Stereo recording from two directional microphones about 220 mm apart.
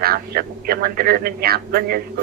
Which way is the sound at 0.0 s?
45° right (ahead or behind).